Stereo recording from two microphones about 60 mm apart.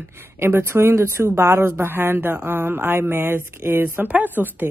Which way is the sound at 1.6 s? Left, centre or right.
Right.